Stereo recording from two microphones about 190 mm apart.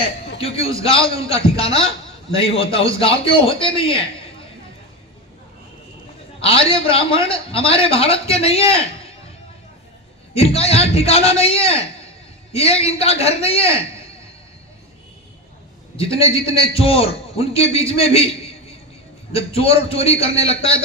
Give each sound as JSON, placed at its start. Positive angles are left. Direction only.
{"t": 0.3, "sound": "a man's voice", "side_deg": 30}
{"t": 6.4, "sound": "a man's voice", "side_deg": 30}
{"t": 10.3, "sound": "a man's voice", "side_deg": 30}
{"t": 16.0, "sound": "a man's voice", "side_deg": 30}